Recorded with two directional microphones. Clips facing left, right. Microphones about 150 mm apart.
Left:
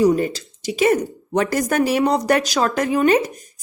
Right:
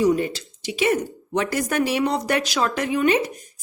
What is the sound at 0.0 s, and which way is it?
A woman's voice, 40° left (ahead or behind).